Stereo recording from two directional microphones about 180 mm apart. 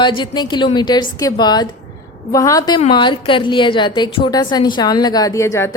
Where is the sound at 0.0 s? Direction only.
25° left (ahead or behind).